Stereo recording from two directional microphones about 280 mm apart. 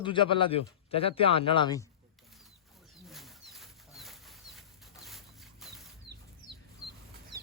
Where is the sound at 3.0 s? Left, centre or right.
Centre.